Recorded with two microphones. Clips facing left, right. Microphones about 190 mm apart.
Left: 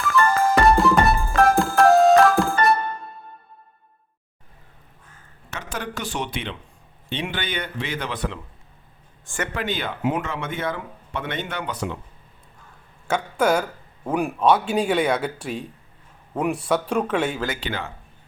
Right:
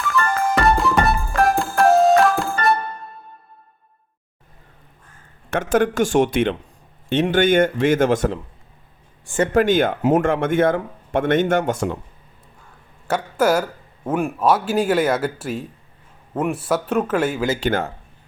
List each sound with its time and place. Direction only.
0.0 s music: centre (ahead or behind)
5.5 s speech: 50° right (ahead or behind)
9.6 s speech: 45° right (ahead or behind)
13.1 s a man's voice: 5° right (ahead or behind)
17.6 s speech: 45° right (ahead or behind)